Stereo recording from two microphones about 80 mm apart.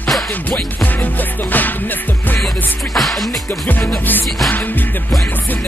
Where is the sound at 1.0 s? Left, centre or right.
Left.